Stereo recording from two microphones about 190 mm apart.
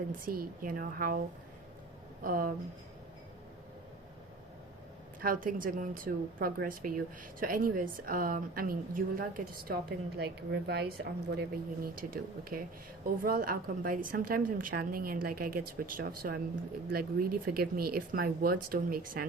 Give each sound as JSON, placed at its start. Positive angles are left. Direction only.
{"t": 0.3, "sound": "a woman's voice", "side_deg": -50}
{"t": 2.2, "sound": "a woman's voice", "side_deg": -50}
{"t": 5.2, "sound": "a woman's voice", "side_deg": -50}